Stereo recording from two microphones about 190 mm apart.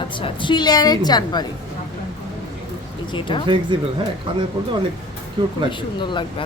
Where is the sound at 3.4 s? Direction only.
25° right (ahead or behind).